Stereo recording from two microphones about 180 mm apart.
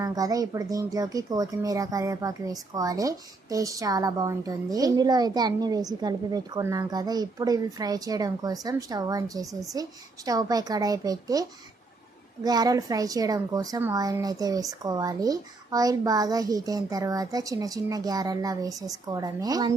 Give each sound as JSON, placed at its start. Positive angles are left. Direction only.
{"t": 0.0, "sound": "speech", "side_deg": -20}